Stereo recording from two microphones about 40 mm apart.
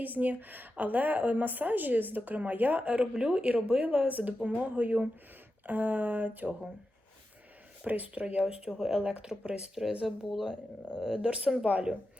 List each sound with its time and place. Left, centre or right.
0.0 s a woman's voice: right
3.0 s speech: right
3.8 s a woman's voice: right
7.9 s speech: right
9.3 s speech: left
10.0 s speech: centre
11.2 s speech: right